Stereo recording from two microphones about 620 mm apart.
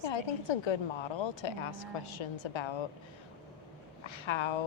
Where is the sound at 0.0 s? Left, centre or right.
Left.